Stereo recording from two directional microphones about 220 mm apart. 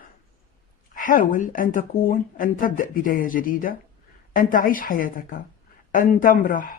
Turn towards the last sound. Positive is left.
turn(degrees=40)  # may be behind; listen again after turning